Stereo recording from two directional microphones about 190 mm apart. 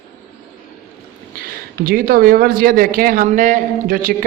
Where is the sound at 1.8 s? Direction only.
50° right (ahead or behind).